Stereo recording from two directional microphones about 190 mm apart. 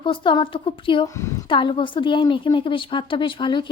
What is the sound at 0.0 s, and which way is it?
A woman's voice, 25° left (ahead or behind).